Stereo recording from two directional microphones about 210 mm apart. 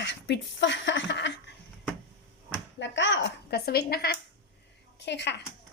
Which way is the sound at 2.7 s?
60° left (ahead or behind).